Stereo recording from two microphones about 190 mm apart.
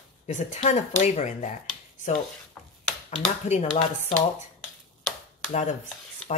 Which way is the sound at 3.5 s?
35° left (ahead or behind).